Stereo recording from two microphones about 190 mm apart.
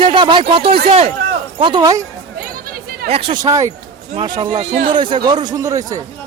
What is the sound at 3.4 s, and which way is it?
Speech, 15° right (ahead or behind).